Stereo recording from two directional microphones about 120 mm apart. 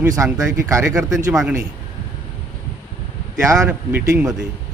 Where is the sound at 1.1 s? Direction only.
5° right (ahead or behind).